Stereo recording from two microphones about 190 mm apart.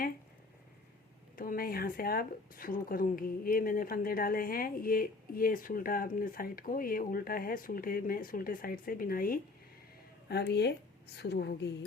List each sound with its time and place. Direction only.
1.4 s speech: 50° left (ahead or behind)
10.2 s a woman's voice: 60° left (ahead or behind)